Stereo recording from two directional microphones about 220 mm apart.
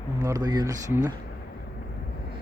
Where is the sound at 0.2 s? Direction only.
15° right (ahead or behind).